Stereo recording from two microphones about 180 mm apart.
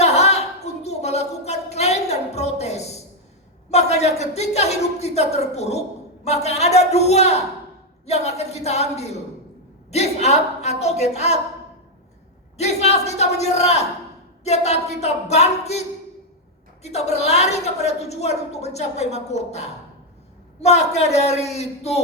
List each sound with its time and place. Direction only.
0.0 s a sound: 35° left (ahead or behind)
3.7 s a woman's voice: 35° left (ahead or behind)
12.5 s a woman's voice: 35° left (ahead or behind)